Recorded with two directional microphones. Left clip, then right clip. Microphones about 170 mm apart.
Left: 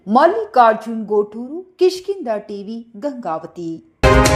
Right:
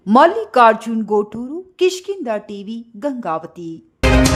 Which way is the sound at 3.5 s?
Centre (ahead or behind).